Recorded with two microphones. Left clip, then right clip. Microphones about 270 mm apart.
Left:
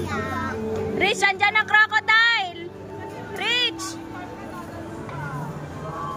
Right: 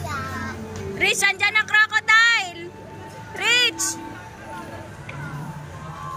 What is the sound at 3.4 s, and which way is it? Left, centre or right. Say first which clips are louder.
Music: right 4 dB; centre.